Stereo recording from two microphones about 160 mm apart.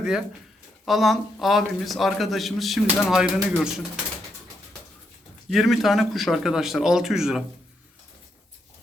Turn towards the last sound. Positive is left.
turn(degrees=-5)  # may be behind; listen again after turning